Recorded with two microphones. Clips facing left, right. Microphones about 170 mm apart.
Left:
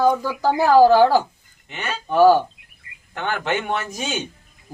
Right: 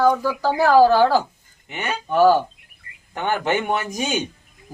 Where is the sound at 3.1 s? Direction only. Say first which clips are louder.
Right 2 dB; 15° right (ahead or behind).